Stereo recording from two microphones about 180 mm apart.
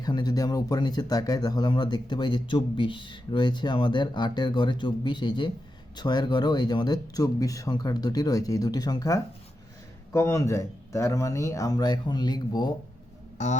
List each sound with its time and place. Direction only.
0.0 s speech: 20° left (ahead or behind)